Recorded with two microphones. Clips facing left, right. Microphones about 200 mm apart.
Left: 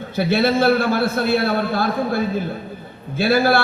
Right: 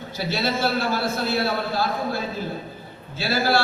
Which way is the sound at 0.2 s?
55° left (ahead or behind).